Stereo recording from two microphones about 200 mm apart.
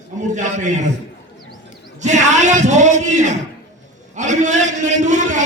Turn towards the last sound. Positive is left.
turn(degrees=-35)  # may be behind; listen again after turning